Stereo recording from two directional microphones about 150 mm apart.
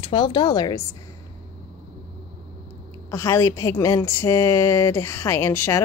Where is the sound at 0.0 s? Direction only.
35° left (ahead or behind).